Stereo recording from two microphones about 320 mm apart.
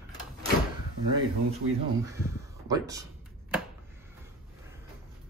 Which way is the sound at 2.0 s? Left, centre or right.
Centre.